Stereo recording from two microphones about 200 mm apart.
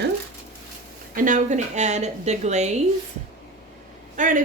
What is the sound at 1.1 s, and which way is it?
A woman's voice, 40° right (ahead or behind).